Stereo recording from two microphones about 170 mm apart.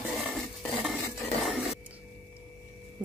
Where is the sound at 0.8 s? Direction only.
Centre (ahead or behind).